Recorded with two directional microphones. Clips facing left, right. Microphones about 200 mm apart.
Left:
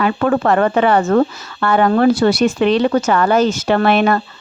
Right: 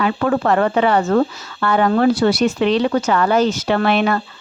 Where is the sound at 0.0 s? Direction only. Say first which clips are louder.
Left 2 dB; 55° left (ahead or behind).